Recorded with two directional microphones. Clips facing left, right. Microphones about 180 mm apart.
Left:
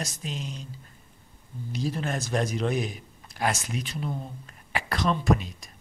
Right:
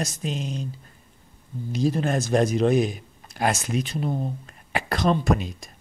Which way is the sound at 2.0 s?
45° right (ahead or behind).